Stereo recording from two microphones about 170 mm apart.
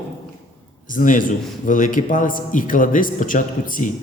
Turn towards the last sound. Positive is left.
turn(degrees=50)  # may be behind; listen again after turning